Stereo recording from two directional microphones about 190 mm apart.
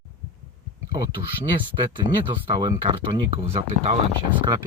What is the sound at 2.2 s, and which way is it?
Speech, 25° right (ahead or behind).